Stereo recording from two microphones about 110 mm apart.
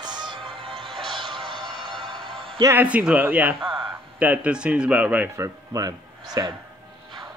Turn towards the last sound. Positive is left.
turn(degrees=-35)  # may be behind; listen again after turning